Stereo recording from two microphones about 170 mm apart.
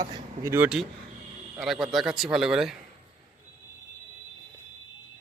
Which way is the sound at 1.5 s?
Centre (ahead or behind).